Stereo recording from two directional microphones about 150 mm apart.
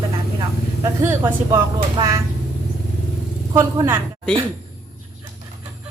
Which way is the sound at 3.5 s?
20° right (ahead or behind).